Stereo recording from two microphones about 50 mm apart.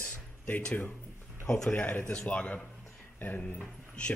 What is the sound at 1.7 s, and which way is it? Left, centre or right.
Speech, left.